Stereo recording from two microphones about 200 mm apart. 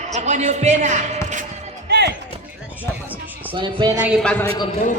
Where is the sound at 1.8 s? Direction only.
55° right (ahead or behind).